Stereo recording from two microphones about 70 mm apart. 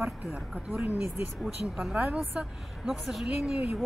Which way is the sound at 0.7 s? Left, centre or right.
Right.